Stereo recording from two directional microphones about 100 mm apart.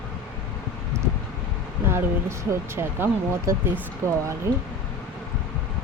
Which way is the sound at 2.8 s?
25° right (ahead or behind).